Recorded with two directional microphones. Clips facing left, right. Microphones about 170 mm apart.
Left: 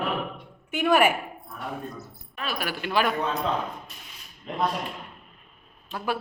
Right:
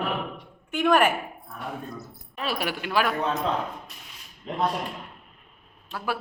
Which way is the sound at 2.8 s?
5° right (ahead or behind).